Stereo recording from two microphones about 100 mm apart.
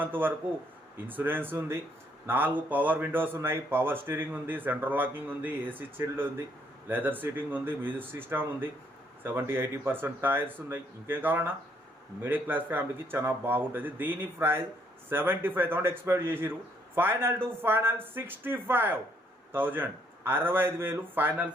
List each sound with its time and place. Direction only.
0.0 s speech: 20° right (ahead or behind)